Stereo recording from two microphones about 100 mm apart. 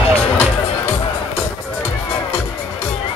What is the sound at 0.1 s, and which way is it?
Music, 15° left (ahead or behind).